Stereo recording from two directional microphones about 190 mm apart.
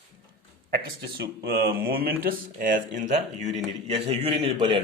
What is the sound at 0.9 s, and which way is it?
Speech, 55° right (ahead or behind).